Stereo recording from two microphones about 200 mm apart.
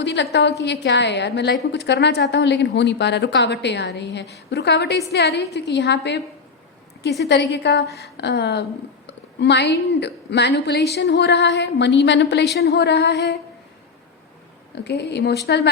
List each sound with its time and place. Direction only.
0.0 s a woman's voice: 60° left (ahead or behind)
14.8 s a woman's voice: 55° left (ahead or behind)